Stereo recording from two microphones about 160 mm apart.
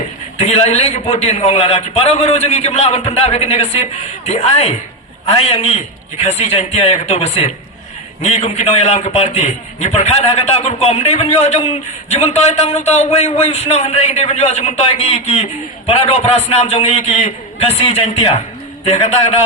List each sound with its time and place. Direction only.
0.3 s a man's voice: 40° left (ahead or behind)